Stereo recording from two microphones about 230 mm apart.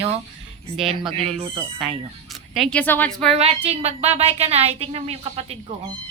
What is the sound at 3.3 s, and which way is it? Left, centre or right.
A woman's voice, right.